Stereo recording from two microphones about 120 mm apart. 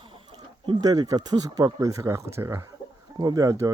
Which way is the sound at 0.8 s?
30° right (ahead or behind).